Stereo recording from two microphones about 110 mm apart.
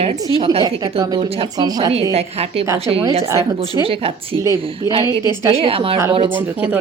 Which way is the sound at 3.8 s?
60° right (ahead or behind).